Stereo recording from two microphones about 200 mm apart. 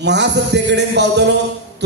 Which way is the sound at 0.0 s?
60° right (ahead or behind).